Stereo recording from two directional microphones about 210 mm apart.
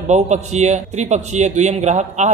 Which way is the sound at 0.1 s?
35° right (ahead or behind).